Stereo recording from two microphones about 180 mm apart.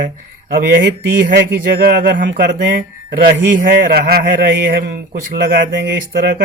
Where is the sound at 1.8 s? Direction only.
55° right (ahead or behind).